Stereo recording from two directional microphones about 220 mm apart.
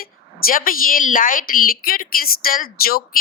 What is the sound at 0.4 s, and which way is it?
A woman's voice, 40° left (ahead or behind).